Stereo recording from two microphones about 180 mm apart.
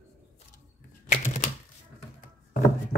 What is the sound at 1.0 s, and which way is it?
Typewriter, 45° left (ahead or behind).